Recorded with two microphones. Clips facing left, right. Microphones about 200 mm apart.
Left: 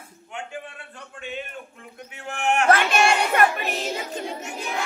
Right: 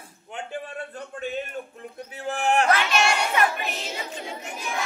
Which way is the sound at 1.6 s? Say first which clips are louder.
Right 5 dB; 35° right (ahead or behind).